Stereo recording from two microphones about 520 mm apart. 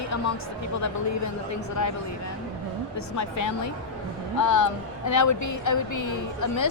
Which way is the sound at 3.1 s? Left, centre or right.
Left.